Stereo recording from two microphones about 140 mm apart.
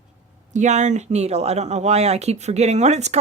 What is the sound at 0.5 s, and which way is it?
Speech, 55° right (ahead or behind).